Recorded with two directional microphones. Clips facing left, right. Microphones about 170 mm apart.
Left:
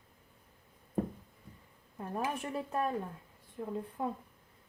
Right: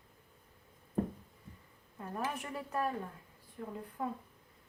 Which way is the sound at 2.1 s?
25° left (ahead or behind).